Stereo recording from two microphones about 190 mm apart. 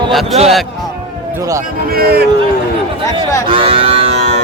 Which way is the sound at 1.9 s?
55° right (ahead or behind).